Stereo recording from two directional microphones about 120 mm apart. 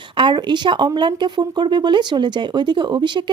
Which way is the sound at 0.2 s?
40° right (ahead or behind).